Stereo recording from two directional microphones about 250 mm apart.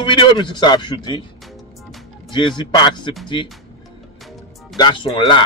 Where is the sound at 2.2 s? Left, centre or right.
Centre.